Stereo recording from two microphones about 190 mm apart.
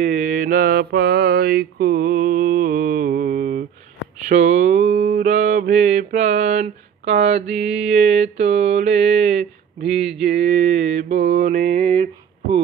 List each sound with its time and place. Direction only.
0.0 s mantra: 40° right (ahead or behind)
4.3 s mantra: 40° right (ahead or behind)
7.4 s mantra: 5° right (ahead or behind)
7.7 s mantra: 35° right (ahead or behind)